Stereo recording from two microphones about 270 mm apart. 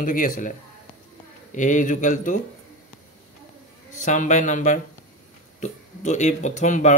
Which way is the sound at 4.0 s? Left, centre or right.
Left.